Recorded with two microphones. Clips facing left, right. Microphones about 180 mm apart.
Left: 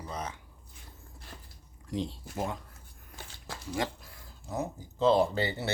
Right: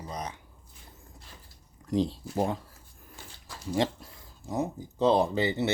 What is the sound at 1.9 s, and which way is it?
Speech, 35° right (ahead or behind).